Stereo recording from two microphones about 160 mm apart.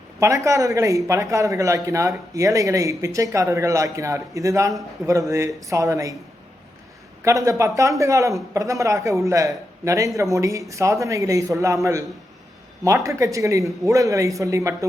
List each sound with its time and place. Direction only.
0.2 s a man's voice: 20° right (ahead or behind)
7.2 s a man's voice: 20° right (ahead or behind)